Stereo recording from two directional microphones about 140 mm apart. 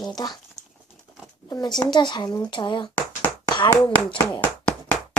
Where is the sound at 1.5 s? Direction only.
30° left (ahead or behind).